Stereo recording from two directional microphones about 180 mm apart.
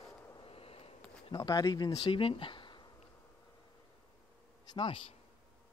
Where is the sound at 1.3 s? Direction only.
20° left (ahead or behind).